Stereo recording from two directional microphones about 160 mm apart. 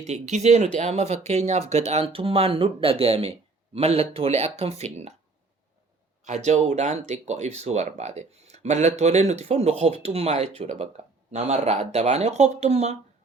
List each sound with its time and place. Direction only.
0.0 s speech: 45° right (ahead or behind)
6.2 s speech: 45° right (ahead or behind)